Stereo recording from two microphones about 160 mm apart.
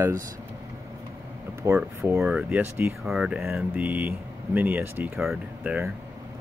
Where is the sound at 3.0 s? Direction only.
5° right (ahead or behind).